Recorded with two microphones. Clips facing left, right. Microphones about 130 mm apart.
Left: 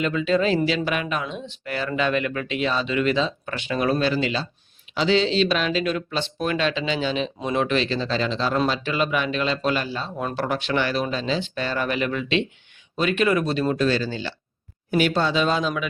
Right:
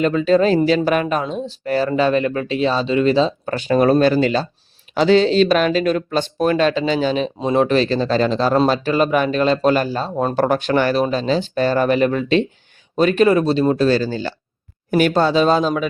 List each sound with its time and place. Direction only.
0.0 s speech: 40° right (ahead or behind)
7.3 s speech: 30° right (ahead or behind)